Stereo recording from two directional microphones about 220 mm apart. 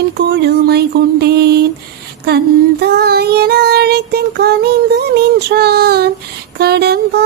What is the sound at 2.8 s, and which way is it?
Child singing, 45° right (ahead or behind).